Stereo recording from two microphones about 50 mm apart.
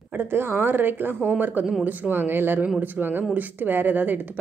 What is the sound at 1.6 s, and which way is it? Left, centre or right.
Speech, centre.